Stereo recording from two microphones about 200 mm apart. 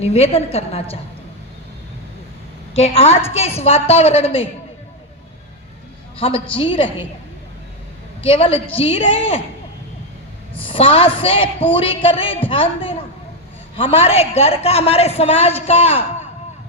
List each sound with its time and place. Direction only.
0.0 s a man's voice: 30° left (ahead or behind)
2.7 s a man's voice: 30° left (ahead or behind)
6.1 s a man's voice: 30° left (ahead or behind)
8.2 s a man's voice: 30° left (ahead or behind)
10.6 s a man's voice: 25° left (ahead or behind)